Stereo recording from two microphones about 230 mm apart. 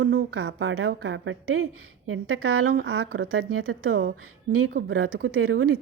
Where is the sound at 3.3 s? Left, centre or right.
Right.